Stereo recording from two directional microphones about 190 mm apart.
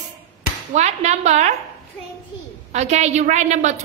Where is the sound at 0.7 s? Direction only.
35° right (ahead or behind).